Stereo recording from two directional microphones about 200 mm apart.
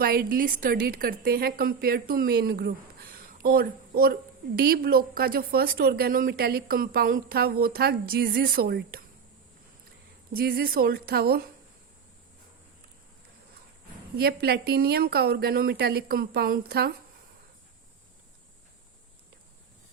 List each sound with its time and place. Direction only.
0.0 s a woman's voice: 50° right (ahead or behind)
10.3 s a woman's voice: 50° right (ahead or behind)
14.2 s a woman's voice: 50° right (ahead or behind)